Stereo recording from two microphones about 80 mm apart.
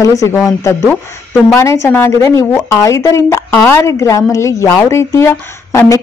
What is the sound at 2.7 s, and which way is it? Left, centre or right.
Speech, left.